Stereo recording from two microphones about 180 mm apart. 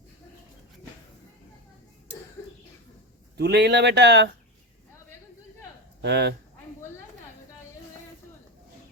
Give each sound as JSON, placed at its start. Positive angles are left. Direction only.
{"t": 3.3, "sound": "speech", "side_deg": -70}
{"t": 6.0, "sound": "speech", "side_deg": -70}